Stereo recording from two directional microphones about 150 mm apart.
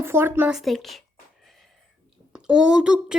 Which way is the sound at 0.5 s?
Centre (ahead or behind).